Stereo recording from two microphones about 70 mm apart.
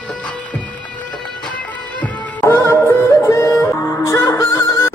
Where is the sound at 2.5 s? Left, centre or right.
Left.